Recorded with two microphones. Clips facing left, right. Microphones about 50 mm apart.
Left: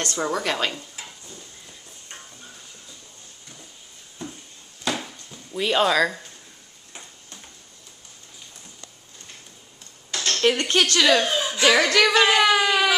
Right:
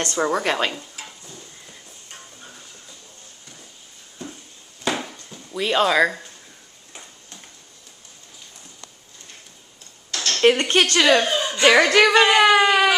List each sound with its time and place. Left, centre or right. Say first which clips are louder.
0.0 s a woman's voice: right 4 dB; centre
0.7 s stir: right 1 dB; centre
4.8 s a sound: right 3 dB; centre
5.6 s speech: right 1 dB; centre
5.9 s a woman's voice: right 3 dB; centre
10.4 s speech: right 4 dB; right
11.1 s speech: right 2 dB; centre
11.6 s a woman's voice: right 4 dB; centre